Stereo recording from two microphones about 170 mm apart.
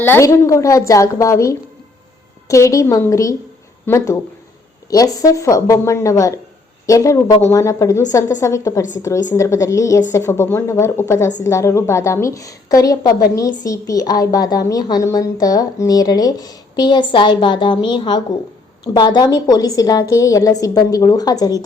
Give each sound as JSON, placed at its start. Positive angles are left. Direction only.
{"t": 0.0, "sound": "a woman's voice", "side_deg": 15}